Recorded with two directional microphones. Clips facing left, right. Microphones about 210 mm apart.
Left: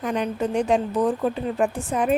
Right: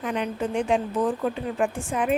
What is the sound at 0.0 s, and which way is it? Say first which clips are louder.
A woman's voice: left 3 dB; 40° left (ahead or behind).